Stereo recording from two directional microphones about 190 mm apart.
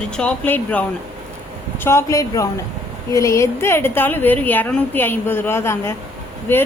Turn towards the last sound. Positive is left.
turn(degrees=10)  # may be behind; listen again after turning